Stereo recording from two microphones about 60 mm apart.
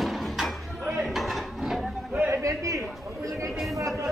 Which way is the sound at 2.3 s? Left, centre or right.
Right.